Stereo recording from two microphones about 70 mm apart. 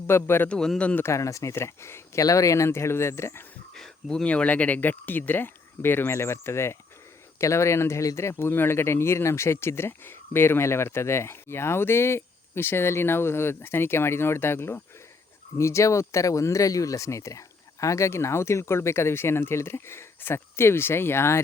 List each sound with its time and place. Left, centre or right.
0.1 s speech: left
0.4 s a man's voice: centre
1.0 s speech: left
2.2 s speech: left
2.6 s speech: left
3.8 s speech: centre; by 21.4 s left